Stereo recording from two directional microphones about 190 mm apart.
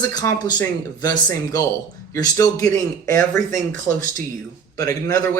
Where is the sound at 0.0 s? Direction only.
20° left (ahead or behind).